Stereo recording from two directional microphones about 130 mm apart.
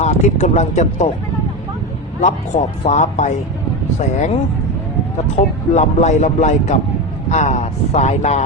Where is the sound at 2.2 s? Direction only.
65° left (ahead or behind).